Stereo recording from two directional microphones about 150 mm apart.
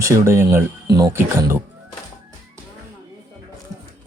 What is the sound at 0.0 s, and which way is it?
Speech, 20° right (ahead or behind).